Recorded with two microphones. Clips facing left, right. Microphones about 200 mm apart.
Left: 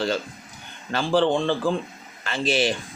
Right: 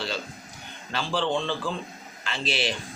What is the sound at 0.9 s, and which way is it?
A man's voice, 50° left (ahead or behind).